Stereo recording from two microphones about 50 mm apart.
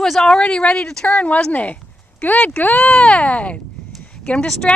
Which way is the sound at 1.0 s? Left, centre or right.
Left.